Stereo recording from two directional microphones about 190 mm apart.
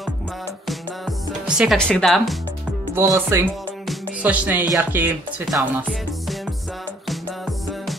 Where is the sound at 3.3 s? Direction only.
15° right (ahead or behind).